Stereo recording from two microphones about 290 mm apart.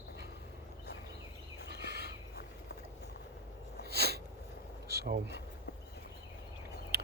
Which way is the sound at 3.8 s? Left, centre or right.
Right.